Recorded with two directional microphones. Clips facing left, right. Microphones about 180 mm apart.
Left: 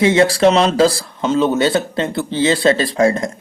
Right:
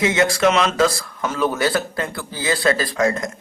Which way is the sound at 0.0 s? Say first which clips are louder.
Left 5 dB; 30° left (ahead or behind).